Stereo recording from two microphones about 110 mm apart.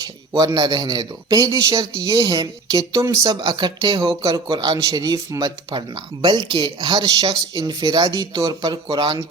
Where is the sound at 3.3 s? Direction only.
40° right (ahead or behind).